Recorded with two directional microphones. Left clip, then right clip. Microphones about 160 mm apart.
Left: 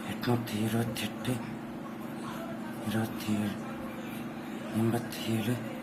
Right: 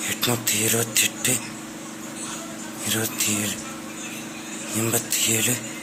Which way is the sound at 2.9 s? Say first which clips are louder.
Right 10 dB; 20° right (ahead or behind).